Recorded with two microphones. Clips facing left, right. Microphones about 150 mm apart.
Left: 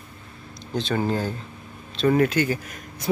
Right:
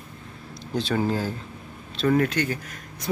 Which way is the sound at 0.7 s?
5° right (ahead or behind).